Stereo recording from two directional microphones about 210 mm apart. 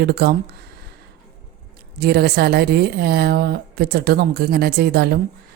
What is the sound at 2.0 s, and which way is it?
A woman's voice, 50° right (ahead or behind).